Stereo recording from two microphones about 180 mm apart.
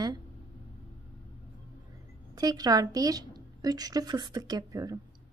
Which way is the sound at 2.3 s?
20° right (ahead or behind).